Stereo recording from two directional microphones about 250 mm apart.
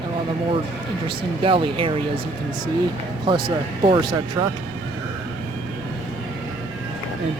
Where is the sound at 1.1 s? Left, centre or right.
Right.